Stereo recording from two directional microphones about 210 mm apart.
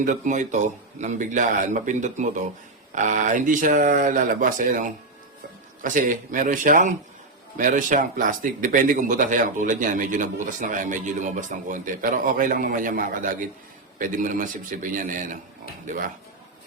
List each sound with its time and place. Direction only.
0.0 s speech: 35° right (ahead or behind)